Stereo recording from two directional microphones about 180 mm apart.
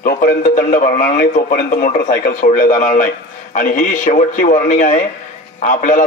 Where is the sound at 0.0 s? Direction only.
50° left (ahead or behind).